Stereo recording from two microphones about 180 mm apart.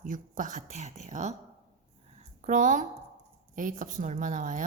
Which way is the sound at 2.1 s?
45° right (ahead or behind).